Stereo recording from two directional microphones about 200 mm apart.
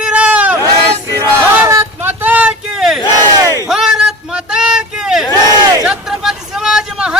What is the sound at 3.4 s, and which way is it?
Battle cry, 15° right (ahead or behind).